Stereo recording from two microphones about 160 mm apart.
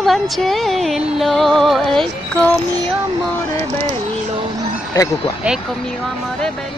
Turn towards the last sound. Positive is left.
turn(degrees=-10)  # may be behind; listen again after turning